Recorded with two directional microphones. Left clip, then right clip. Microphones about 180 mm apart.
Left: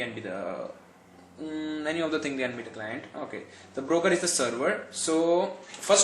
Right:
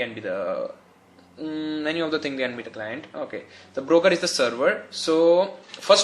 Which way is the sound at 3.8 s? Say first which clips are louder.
Right 6 dB; 35° right (ahead or behind).